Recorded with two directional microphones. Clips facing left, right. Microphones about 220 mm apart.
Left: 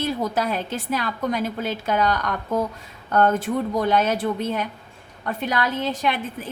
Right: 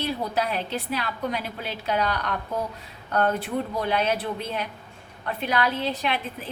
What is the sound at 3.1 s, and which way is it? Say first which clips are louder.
A woman's voice: left 4 dB; 45° left (ahead or behind).